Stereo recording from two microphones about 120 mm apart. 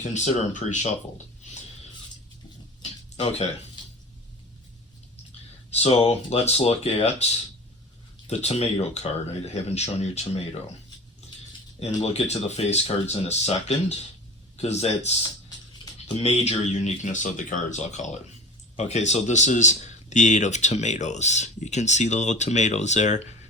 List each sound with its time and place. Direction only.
0.0 s speech: 75° left (ahead or behind)
2.8 s a sound: 60° left (ahead or behind)
5.7 s speech: 60° left (ahead or behind)
8.3 s speech: 60° left (ahead or behind)
12.0 s speech: 60° left (ahead or behind)
16.1 s speech: 65° left (ahead or behind); by 23.3 s 80° left